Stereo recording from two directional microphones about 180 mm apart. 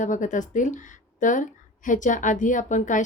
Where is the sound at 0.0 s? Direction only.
45° left (ahead or behind).